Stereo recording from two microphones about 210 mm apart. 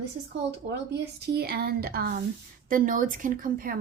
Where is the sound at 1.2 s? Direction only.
50° right (ahead or behind).